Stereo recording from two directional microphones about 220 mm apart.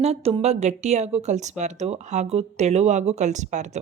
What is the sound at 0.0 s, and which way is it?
Speech, 25° right (ahead or behind).